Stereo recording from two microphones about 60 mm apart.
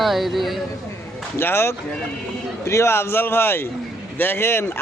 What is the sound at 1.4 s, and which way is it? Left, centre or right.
A man's voice, left.